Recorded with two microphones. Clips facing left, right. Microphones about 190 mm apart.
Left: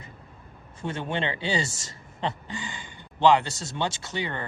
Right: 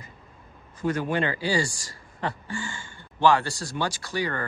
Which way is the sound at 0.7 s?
25° left (ahead or behind).